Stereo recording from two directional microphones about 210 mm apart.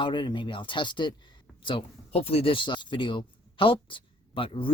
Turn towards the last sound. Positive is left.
turn(degrees=25)  # may be behind; listen again after turning